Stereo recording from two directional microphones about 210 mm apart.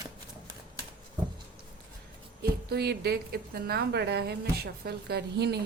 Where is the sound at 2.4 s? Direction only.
50° right (ahead or behind).